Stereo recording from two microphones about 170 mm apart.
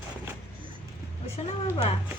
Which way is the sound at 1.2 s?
40° left (ahead or behind).